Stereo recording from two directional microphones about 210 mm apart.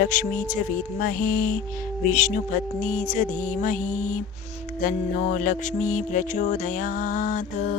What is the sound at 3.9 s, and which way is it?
Music, 90° left.